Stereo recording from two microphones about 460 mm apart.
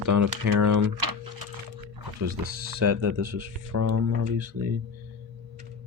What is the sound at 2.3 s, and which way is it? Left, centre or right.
Speech, right.